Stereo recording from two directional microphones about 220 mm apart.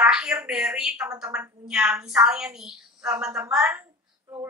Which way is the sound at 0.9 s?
15° right (ahead or behind).